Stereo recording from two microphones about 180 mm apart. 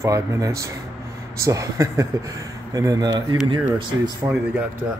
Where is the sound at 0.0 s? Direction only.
15° right (ahead or behind).